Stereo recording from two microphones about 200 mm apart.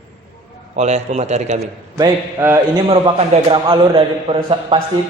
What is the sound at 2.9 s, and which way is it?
A man's voice, 25° right (ahead or behind).